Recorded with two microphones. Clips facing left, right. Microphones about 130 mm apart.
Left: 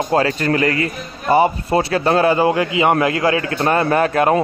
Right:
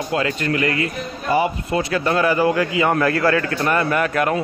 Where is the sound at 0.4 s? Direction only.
40° left (ahead or behind).